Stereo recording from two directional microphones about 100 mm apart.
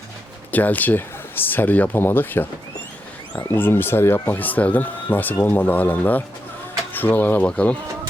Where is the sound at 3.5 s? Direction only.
20° left (ahead or behind).